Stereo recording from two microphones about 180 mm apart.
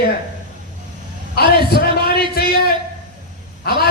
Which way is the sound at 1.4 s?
60° left (ahead or behind).